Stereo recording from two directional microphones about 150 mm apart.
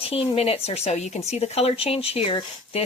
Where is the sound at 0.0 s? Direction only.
40° left (ahead or behind).